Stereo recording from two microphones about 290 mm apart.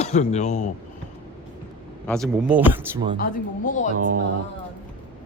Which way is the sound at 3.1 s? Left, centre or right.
Left.